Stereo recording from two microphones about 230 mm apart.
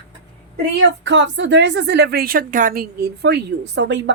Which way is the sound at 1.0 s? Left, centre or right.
Right.